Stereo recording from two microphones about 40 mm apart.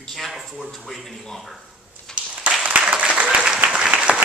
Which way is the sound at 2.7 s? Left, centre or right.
Right.